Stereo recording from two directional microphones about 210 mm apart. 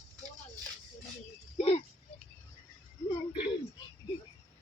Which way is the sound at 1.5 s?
30° left (ahead or behind).